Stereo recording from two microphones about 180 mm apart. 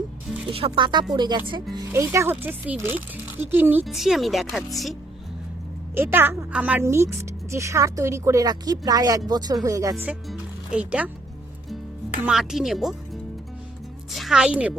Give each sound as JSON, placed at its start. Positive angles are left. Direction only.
{"t": 0.5, "sound": "a woman's voice", "side_deg": -30}
{"t": 5.9, "sound": "a woman's voice", "side_deg": -10}
{"t": 10.1, "sound": "speech", "side_deg": -5}
{"t": 12.2, "sound": "a woman's voice", "side_deg": -5}
{"t": 14.1, "sound": "a woman's voice", "side_deg": 0}